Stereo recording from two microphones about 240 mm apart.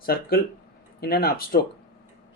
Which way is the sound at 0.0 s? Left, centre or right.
Left.